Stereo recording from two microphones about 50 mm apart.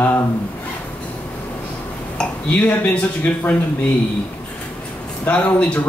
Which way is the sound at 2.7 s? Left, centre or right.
Left.